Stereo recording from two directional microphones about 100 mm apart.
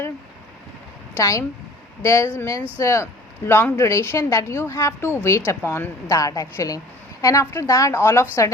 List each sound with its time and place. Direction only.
1.1 s a woman's voice: 30° left (ahead or behind)